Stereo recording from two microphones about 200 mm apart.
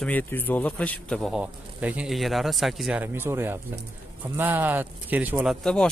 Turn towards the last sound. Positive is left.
turn(degrees=5)  # may be behind; listen again after turning